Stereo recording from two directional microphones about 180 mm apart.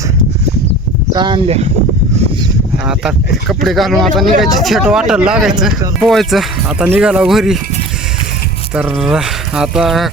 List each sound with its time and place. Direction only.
1.1 s speech: 25° right (ahead or behind)
2.8 s speech: 5° right (ahead or behind)
8.7 s speech: 5° right (ahead or behind)